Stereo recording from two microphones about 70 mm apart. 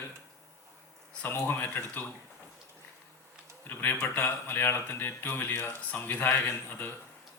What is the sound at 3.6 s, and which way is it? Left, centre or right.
A man's voice, left.